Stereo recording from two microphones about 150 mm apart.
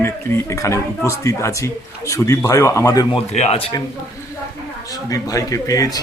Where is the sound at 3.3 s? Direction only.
45° left (ahead or behind).